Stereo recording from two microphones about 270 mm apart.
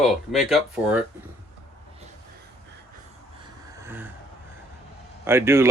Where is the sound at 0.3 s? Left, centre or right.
Centre.